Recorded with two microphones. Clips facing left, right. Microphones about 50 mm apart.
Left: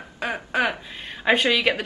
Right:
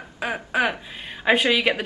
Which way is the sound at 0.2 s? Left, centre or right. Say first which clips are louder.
Right 1 dB; centre.